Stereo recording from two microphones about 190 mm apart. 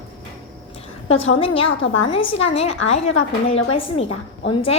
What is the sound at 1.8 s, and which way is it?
Speech, 90° left.